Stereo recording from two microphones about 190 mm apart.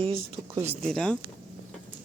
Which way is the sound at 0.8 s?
5° left (ahead or behind).